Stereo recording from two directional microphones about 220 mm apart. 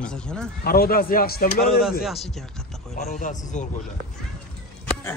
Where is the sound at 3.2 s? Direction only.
35° left (ahead or behind).